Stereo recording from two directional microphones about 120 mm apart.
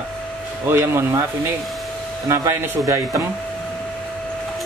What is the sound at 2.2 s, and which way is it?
Speech, 20° right (ahead or behind).